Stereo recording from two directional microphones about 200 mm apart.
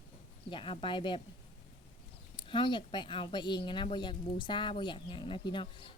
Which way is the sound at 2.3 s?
25° left (ahead or behind).